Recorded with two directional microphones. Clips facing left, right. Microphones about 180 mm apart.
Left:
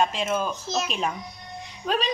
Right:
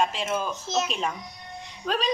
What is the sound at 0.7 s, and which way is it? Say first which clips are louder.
Speech: right 3 dB; 20° right (ahead or behind).